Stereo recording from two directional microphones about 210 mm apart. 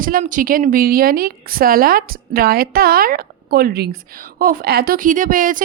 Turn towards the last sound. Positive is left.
turn(degrees=-40)  # may be behind; listen again after turning